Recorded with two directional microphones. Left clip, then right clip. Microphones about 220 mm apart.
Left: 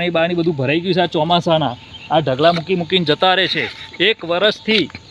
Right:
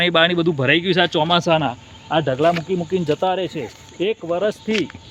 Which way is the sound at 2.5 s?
25° left (ahead or behind).